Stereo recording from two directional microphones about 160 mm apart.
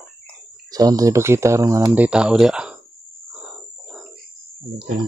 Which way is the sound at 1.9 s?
10° right (ahead or behind).